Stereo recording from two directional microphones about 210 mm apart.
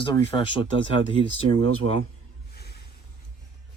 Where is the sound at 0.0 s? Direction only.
25° left (ahead or behind).